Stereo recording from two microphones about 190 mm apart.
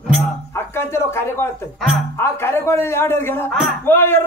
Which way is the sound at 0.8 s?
10° left (ahead or behind).